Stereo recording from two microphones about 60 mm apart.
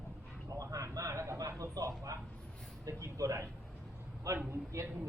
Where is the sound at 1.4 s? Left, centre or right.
Right.